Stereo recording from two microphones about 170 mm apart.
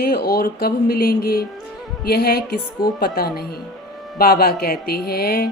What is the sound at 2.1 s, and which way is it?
Music, 65° left (ahead or behind).